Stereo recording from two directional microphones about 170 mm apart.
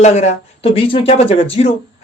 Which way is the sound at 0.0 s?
40° left (ahead or behind).